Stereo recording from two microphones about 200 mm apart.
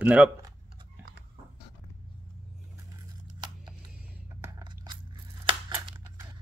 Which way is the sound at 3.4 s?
20° right (ahead or behind).